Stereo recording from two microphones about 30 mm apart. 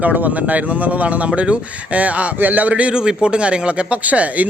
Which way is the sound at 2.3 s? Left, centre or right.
Right.